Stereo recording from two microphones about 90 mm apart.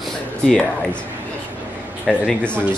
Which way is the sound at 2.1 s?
Centre (ahead or behind).